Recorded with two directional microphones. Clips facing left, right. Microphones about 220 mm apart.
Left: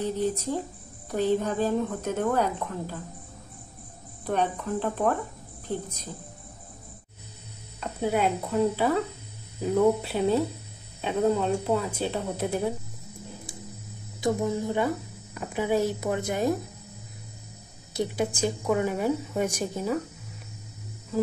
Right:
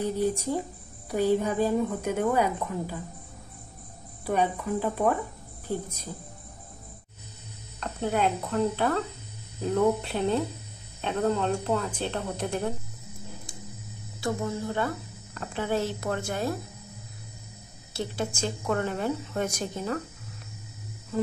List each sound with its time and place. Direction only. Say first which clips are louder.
0.0 s speech: right 1 dB; 10° right (ahead or behind)
4.3 s speech: right 1 dB; 10° right (ahead or behind)
7.8 s a woman's voice: left 1 dB; 5° left (ahead or behind)
14.2 s a woman's voice: left 4 dB; 15° left (ahead or behind)
17.9 s a woman's voice: left 4 dB; 15° left (ahead or behind)